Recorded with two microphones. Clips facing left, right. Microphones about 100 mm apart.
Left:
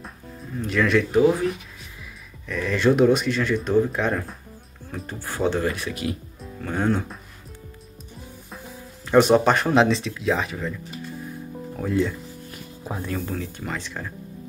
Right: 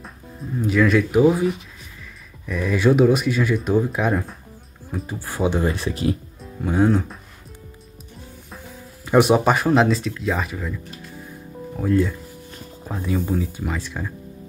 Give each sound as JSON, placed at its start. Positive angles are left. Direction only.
{"t": 0.5, "sound": "speech", "side_deg": -5}
{"t": 6.6, "sound": "speech", "side_deg": -10}
{"t": 8.5, "sound": "music", "side_deg": 0}
{"t": 9.0, "sound": "speech", "side_deg": -5}